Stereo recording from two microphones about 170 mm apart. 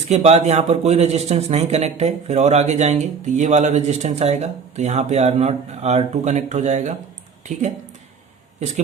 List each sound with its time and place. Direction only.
0.1 s speech: 40° right (ahead or behind)